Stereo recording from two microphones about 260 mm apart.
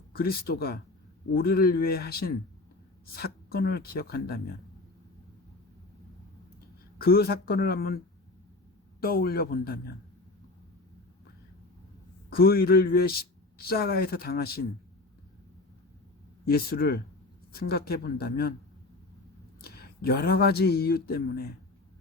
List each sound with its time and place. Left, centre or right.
0.2 s speech: left
7.0 s speech: left
9.0 s speech: left
12.3 s speech: left
16.5 s speech: left
19.6 s speech: left